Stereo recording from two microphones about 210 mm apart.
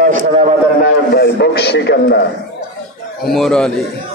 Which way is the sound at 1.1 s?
50° left (ahead or behind).